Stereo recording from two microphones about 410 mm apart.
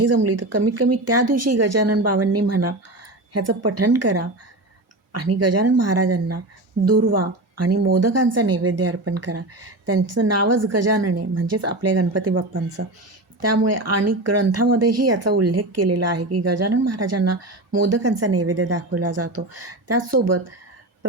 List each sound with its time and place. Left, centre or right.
0.0 s speech: right
6.8 s a woman's voice: right
7.6 s speech: right
13.7 s speech: right